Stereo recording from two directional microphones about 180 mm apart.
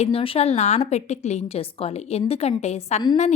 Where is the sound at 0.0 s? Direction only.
30° left (ahead or behind).